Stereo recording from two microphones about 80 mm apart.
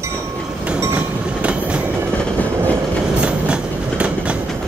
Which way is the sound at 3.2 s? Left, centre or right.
Centre.